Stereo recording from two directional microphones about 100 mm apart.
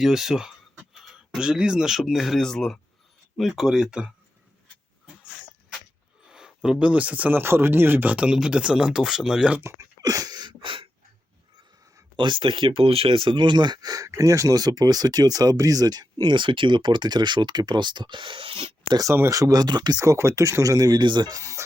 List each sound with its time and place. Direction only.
0.0 s speech: 5° right (ahead or behind)
6.2 s speech: 5° right (ahead or behind)
9.6 s a sound: 30° right (ahead or behind); by 10.8 s 60° right (ahead or behind)
12.1 s speech: 55° right (ahead or behind)
19.3 s speech: 35° right (ahead or behind)